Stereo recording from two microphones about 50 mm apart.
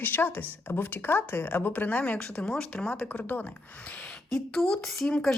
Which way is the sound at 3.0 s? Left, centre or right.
Left.